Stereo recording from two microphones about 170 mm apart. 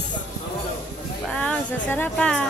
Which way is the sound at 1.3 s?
5° left (ahead or behind).